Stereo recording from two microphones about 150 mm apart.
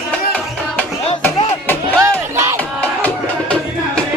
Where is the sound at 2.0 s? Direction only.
20° right (ahead or behind).